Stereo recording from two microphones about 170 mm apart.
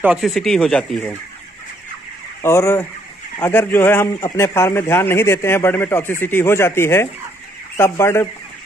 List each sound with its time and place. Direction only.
0.0 s speech: 5° right (ahead or behind)
2.4 s a man's voice: 15° left (ahead or behind)